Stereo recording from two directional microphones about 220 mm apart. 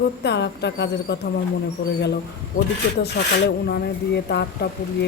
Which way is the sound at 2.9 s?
50° left (ahead or behind).